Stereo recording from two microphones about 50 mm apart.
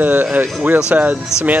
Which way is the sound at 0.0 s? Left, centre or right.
Right.